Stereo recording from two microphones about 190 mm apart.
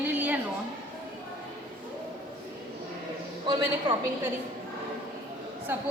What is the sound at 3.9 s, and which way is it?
Speech, 25° right (ahead or behind).